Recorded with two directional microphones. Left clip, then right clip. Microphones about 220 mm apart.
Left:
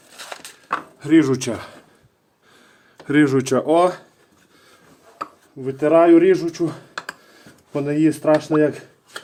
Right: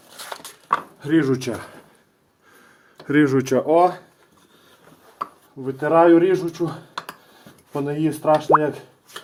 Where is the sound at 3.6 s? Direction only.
30° left (ahead or behind).